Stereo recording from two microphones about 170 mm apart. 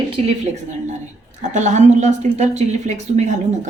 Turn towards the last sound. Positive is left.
turn(degrees=-45)  # may be behind; listen again after turning